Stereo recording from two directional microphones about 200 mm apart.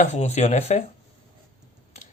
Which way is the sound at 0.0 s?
35° left (ahead or behind).